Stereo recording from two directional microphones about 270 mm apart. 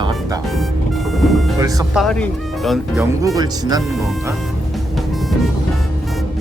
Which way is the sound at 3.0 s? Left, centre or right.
Centre.